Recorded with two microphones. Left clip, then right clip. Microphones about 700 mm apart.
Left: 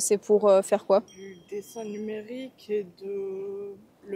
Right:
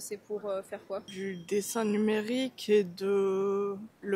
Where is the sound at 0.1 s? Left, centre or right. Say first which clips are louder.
Left 15 dB; left.